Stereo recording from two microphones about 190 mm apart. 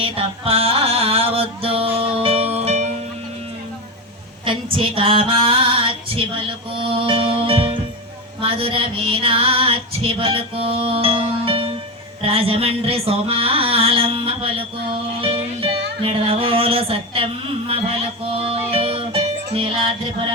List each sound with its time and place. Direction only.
0.0 s music: 30° right (ahead or behind)
4.4 s female singing: 25° right (ahead or behind)
15.2 s music: 30° right (ahead or behind)
18.3 s music: 30° right (ahead or behind)
19.5 s female singing: 25° right (ahead or behind)